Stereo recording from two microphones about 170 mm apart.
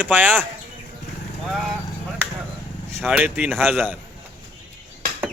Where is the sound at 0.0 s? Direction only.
10° right (ahead or behind).